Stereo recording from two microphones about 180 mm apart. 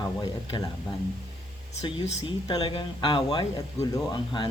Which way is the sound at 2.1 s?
35° left (ahead or behind).